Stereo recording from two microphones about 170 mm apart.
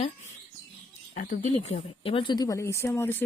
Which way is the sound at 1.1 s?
50° left (ahead or behind).